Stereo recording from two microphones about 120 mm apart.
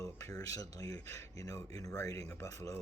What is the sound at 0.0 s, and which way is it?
Speech, 25° left (ahead or behind).